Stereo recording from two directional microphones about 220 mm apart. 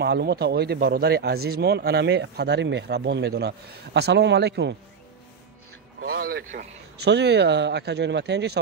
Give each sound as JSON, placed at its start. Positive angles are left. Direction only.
{"t": 0.0, "sound": "speech", "side_deg": -50}
{"t": 6.1, "sound": "speech", "side_deg": -45}
{"t": 7.1, "sound": "speech", "side_deg": -50}